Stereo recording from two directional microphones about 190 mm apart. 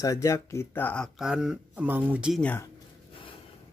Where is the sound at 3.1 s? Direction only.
25° left (ahead or behind).